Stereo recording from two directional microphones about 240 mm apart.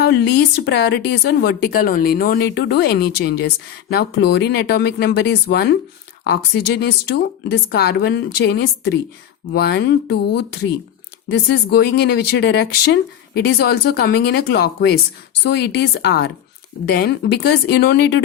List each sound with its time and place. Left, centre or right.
0.0 s speech: left